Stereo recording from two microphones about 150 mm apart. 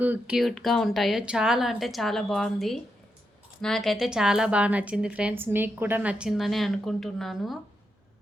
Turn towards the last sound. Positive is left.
turn(degrees=0)  # may be behind; listen again after turning